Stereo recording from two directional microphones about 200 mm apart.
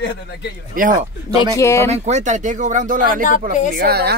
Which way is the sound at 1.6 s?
15° left (ahead or behind).